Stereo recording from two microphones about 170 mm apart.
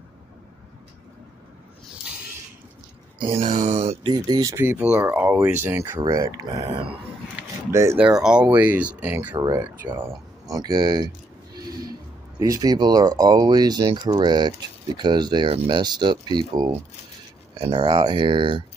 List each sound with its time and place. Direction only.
3.2 s speech: 30° right (ahead or behind)
3.4 s speech: 45° right (ahead or behind); by 6.6 s 20° right (ahead or behind)
7.7 s speech: 15° right (ahead or behind)
8.2 s speech: 5° right (ahead or behind); by 11.1 s 25° right (ahead or behind)
12.4 s speech: 20° right (ahead or behind)